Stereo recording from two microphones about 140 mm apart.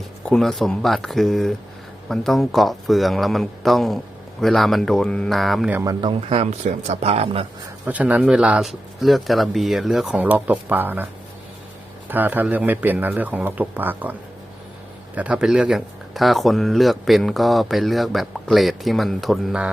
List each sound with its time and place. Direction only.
0.3 s speech: 5° left (ahead or behind)
5.7 s speech: 25° right (ahead or behind)
6.1 s speech: 40° right (ahead or behind)
7.9 s speech: 10° right (ahead or behind)